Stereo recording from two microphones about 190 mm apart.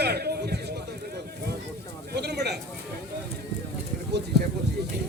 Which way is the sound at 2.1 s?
60° right (ahead or behind).